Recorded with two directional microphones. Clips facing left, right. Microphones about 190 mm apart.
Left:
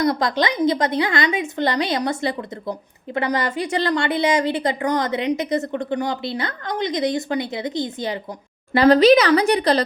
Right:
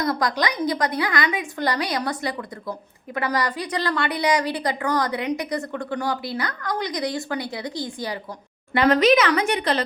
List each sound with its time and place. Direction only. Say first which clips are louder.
0.0 s a woman's voice: left 4 dB; 25° left (ahead or behind)
8.7 s speech: left 5 dB; 35° left (ahead or behind)